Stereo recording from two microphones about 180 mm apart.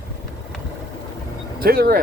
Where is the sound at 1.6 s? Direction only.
60° right (ahead or behind).